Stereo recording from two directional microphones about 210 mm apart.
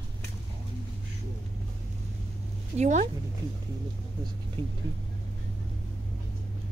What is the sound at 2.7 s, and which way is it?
Speech, 35° right (ahead or behind).